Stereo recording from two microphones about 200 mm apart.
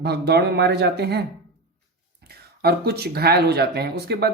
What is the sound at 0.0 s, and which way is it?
A man's voice, 55° right (ahead or behind).